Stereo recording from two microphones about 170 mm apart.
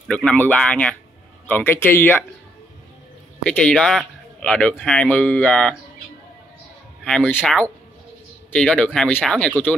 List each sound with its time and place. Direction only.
0.1 s speech: 10° left (ahead or behind)
3.4 s speech: 5° left (ahead or behind)
7.1 s speech: 5° left (ahead or behind)